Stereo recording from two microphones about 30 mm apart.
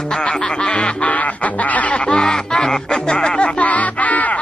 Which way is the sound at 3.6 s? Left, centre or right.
Left.